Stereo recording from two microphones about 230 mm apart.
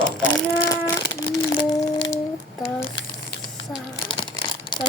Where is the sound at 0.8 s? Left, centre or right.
Centre.